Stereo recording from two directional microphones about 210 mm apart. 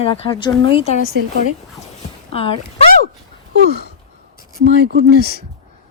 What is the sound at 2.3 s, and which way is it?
Speech, 25° left (ahead or behind).